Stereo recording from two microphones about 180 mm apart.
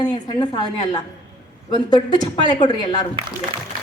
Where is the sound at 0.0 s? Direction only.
25° left (ahead or behind).